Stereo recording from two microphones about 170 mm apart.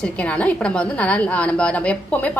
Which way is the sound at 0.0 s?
5° left (ahead or behind).